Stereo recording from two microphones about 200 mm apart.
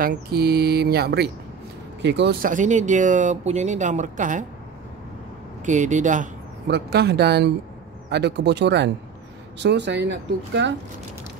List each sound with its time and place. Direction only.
0.0 s speech: 50° right (ahead or behind)
2.5 s speech: 40° right (ahead or behind)
5.7 s speech: 35° right (ahead or behind)
6.7 s speech: 55° right (ahead or behind)